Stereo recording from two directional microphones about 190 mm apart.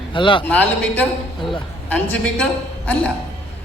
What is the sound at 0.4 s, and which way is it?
Speech, 10° left (ahead or behind).